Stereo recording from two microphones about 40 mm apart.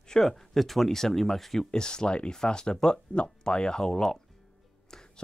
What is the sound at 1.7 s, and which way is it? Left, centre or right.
Speech, centre.